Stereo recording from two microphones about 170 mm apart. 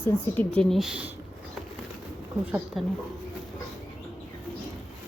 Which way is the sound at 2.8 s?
Centre (ahead or behind).